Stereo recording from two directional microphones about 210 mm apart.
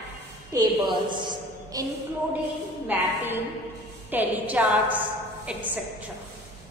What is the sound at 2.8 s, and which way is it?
A woman's voice, 10° right (ahead or behind).